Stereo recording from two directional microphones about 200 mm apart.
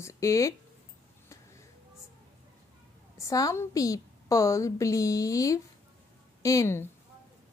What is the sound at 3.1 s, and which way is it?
A woman's voice, 15° left (ahead or behind).